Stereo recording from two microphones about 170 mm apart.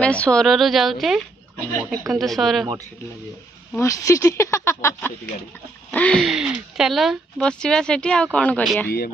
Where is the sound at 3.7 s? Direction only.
20° left (ahead or behind).